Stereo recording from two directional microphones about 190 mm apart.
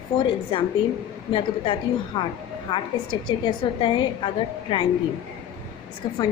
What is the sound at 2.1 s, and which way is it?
Speech, 25° left (ahead or behind).